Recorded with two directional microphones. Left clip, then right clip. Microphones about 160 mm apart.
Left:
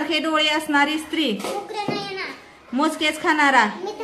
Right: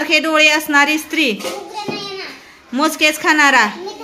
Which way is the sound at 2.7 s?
20° right (ahead or behind).